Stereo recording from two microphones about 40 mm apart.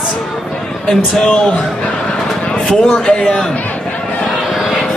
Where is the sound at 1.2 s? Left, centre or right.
Left.